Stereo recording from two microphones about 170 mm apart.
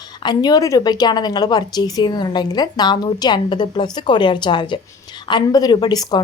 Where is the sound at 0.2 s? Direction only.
25° left (ahead or behind).